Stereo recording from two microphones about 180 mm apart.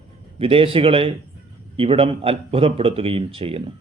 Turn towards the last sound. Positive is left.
turn(degrees=-30)  # may be behind; listen again after turning